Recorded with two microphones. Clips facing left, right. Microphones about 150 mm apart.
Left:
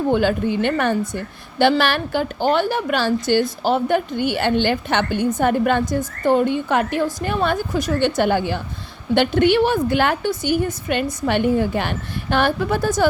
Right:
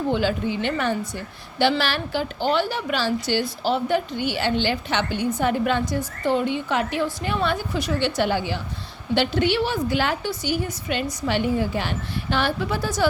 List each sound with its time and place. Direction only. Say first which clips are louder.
0.1 s a woman's voice: left 5 dB; 55° left (ahead or behind)